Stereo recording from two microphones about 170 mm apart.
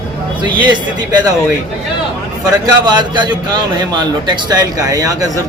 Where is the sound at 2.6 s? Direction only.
25° right (ahead or behind).